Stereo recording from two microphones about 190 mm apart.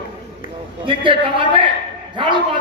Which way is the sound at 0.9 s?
25° right (ahead or behind).